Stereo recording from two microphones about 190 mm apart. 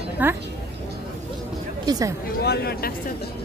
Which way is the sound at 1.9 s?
20° right (ahead or behind).